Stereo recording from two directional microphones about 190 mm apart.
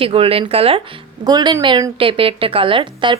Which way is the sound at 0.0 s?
30° right (ahead or behind).